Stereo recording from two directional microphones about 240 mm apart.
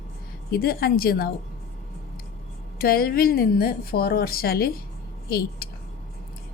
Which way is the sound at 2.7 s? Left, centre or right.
Left.